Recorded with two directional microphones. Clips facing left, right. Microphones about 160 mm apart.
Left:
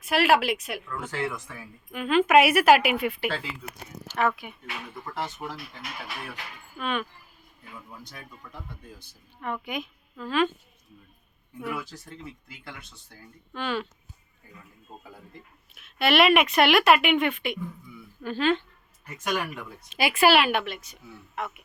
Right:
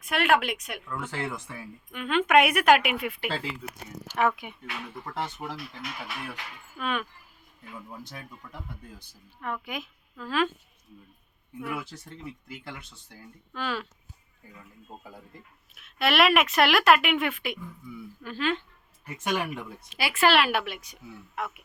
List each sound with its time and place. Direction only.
0.0 s speech: 5° left (ahead or behind)
1.9 s speech: 5° left (ahead or behind)
4.1 s a woman's voice: 15° right (ahead or behind)
4.9 s speech: 30° right (ahead or behind)
6.7 s speech: centre (ahead or behind)
9.4 s speech: centre (ahead or behind)
13.5 s speech: centre (ahead or behind)
15.7 s speech: centre (ahead or behind)
18.2 s a woman's voice: 30° left (ahead or behind)
19.1 s speech: 25° right (ahead or behind)
19.9 s speech: 15° left (ahead or behind)
20.4 s a woman's voice: 5° right (ahead or behind)